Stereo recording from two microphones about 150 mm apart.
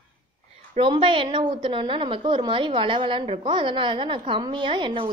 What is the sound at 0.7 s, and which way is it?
A woman's voice, 35° right (ahead or behind).